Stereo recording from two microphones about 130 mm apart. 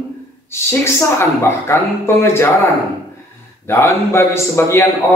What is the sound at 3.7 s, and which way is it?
Speech, 20° left (ahead or behind).